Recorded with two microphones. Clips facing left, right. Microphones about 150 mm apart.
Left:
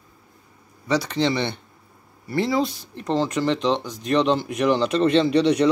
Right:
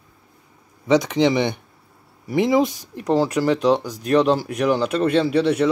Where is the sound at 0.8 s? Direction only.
20° right (ahead or behind).